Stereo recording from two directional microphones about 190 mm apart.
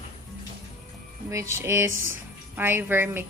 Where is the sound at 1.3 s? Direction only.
15° right (ahead or behind).